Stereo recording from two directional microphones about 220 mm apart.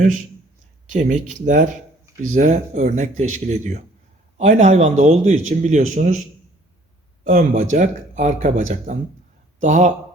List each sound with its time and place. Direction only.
0.9 s speech: 35° right (ahead or behind)
7.3 s speech: 35° right (ahead or behind)